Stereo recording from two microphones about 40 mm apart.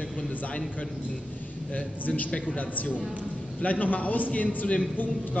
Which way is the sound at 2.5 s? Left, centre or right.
Left.